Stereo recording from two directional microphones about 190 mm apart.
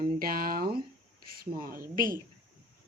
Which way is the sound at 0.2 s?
50° right (ahead or behind).